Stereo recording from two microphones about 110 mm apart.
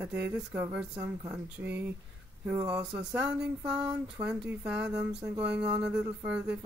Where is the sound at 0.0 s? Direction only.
15° right (ahead or behind).